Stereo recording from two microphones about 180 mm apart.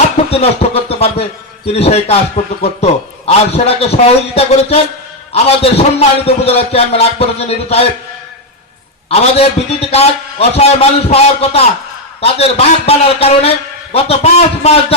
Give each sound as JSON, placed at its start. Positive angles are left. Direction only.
{"t": 0.3, "sound": "a sound", "side_deg": 35}
{"t": 1.6, "sound": "a man's voice", "side_deg": 35}
{"t": 9.0, "sound": "a man's voice", "side_deg": 35}